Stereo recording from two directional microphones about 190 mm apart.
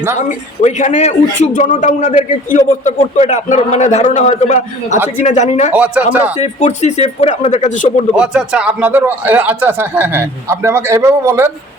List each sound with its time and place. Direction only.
0.2 s a man's voice: 40° left (ahead or behind)
4.9 s speech: 10° right (ahead or behind)
5.2 s a man's voice: 35° left (ahead or behind)
5.7 s speech: 5° right (ahead or behind)
6.4 s a man's voice: 35° left (ahead or behind)
8.1 s speech: 5° right (ahead or behind)